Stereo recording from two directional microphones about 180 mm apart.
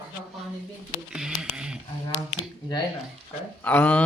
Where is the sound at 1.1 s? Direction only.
5° right (ahead or behind).